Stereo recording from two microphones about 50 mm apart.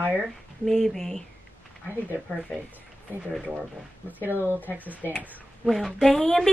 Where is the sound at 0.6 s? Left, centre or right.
Centre.